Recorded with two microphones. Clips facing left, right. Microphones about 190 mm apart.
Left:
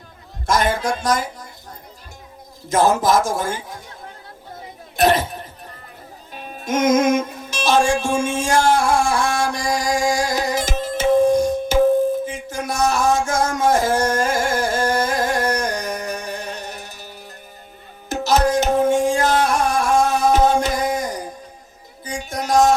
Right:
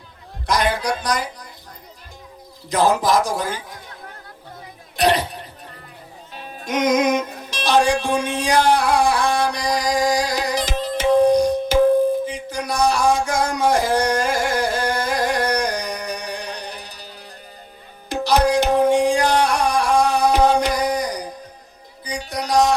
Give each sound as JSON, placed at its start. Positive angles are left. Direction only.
{"t": 0.4, "sound": "speech", "side_deg": 50}
{"t": 2.6, "sound": "speech", "side_deg": 50}
{"t": 4.9, "sound": "speech", "side_deg": 50}
{"t": 6.7, "sound": "music", "side_deg": 50}
{"t": 8.7, "sound": "a sound", "side_deg": 50}
{"t": 12.2, "sound": "music", "side_deg": 50}
{"t": 14.6, "sound": "a sound", "side_deg": 50}
{"t": 15.2, "sound": "a sound", "side_deg": -15}
{"t": 15.5, "sound": "music", "side_deg": 50}
{"t": 18.1, "sound": "music", "side_deg": 45}
{"t": 19.1, "sound": "music", "side_deg": -15}
{"t": 19.5, "sound": "a sound", "side_deg": 50}
{"t": 22.0, "sound": "music", "side_deg": 50}